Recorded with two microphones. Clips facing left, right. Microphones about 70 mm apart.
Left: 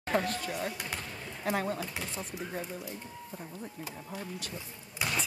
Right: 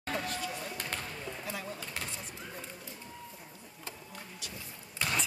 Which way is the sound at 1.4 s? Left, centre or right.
Left.